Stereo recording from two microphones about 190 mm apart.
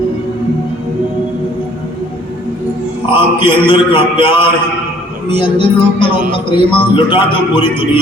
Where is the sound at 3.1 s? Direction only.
25° left (ahead or behind).